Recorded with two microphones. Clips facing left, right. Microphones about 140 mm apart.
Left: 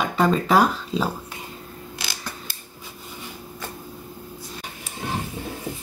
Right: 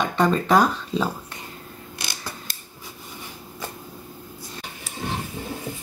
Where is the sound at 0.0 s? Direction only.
5° left (ahead or behind).